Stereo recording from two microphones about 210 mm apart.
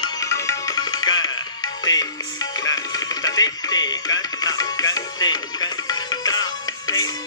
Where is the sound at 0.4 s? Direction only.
15° left (ahead or behind).